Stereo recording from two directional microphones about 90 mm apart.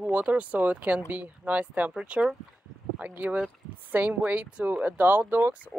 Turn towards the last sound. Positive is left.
turn(degrees=-20)  # may be behind; listen again after turning